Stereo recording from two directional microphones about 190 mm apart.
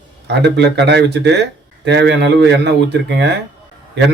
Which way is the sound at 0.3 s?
65° right (ahead or behind).